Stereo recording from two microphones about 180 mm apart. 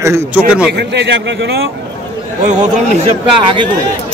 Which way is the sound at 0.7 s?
70° right (ahead or behind).